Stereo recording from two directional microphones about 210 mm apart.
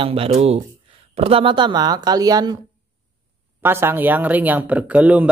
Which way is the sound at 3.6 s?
10° right (ahead or behind).